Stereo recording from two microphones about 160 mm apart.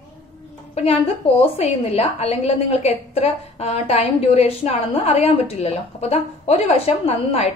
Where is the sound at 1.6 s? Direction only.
40° left (ahead or behind).